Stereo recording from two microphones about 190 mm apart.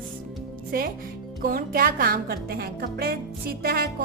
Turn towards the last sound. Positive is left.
turn(degrees=-55)  # may be behind; listen again after turning